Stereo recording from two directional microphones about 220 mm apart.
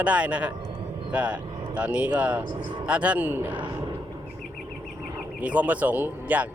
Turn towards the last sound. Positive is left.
turn(degrees=-10)  # may be behind; listen again after turning